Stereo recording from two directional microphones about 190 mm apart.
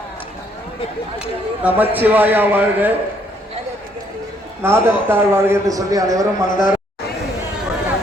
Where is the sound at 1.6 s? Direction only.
10° right (ahead or behind).